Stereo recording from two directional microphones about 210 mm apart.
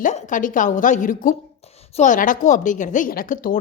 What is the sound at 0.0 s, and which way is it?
Speech, 40° left (ahead or behind).